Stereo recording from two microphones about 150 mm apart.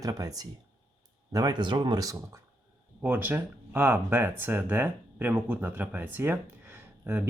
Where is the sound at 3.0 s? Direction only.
10° right (ahead or behind).